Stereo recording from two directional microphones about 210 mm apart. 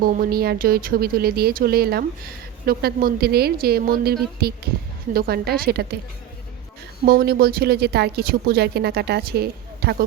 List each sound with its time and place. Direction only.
0.0 s speech: 45° right (ahead or behind)
7.0 s speech: 45° right (ahead or behind)